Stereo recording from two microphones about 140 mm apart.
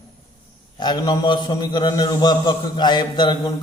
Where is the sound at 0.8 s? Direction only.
30° left (ahead or behind).